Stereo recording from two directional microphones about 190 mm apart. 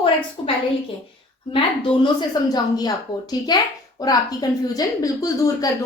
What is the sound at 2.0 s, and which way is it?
A woman's voice, 20° left (ahead or behind).